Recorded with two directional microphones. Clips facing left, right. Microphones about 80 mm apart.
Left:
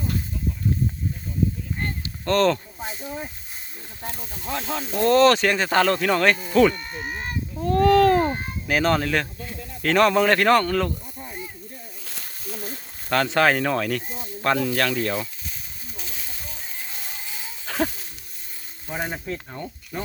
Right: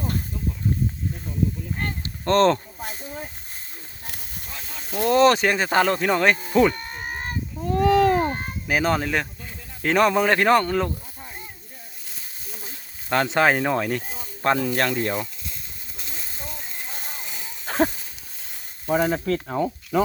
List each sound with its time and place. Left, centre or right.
2.2 s speech: right
4.2 s speech: left
4.9 s speech: centre
5.1 s speech: centre
6.7 s a sound: right
7.6 s speech: centre
13.1 s speech: right
16.9 s music: right
17.7 s wild animals: right
18.9 s speech: right
19.9 s speech: right